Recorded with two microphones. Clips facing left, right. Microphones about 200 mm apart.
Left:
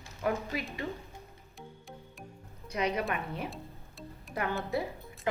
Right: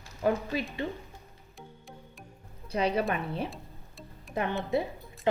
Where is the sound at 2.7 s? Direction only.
30° right (ahead or behind).